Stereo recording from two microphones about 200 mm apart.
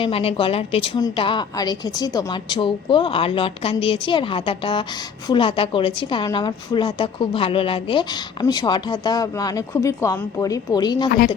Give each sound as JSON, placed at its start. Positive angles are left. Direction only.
{"t": 0.0, "sound": "a woman's voice", "side_deg": 30}